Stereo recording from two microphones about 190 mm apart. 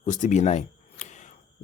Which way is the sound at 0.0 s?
40° left (ahead or behind).